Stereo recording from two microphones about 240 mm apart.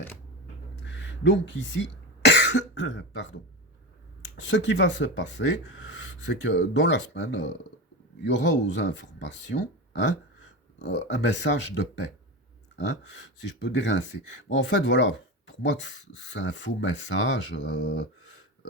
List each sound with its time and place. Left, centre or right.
0.9 s cough: left
4.4 s speech: left